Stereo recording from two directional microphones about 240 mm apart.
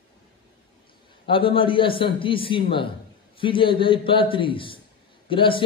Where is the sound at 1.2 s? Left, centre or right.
Left.